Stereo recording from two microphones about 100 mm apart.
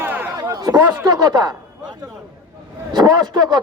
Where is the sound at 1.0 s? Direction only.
40° right (ahead or behind).